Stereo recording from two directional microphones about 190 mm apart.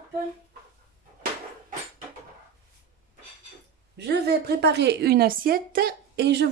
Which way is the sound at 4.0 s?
55° right (ahead or behind).